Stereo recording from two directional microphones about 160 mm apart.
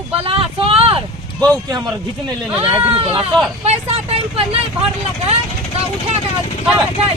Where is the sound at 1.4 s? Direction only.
25° right (ahead or behind).